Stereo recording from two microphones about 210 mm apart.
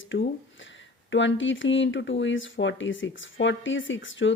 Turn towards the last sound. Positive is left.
turn(degrees=65)  # may be behind; listen again after turning